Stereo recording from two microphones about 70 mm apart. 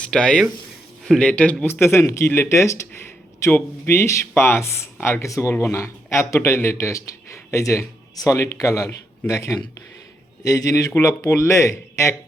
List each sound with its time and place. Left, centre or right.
0.0 s a man's voice: centre
1.6 s speech: left
4.9 s speech: left
5.2 s a man's voice: left
8.1 s a man's voice: left